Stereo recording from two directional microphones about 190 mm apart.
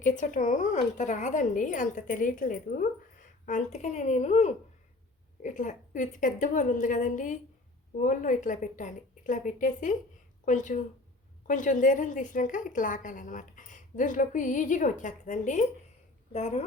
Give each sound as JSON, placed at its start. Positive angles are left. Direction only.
{"t": 0.0, "sound": "a woman's voice", "side_deg": 45}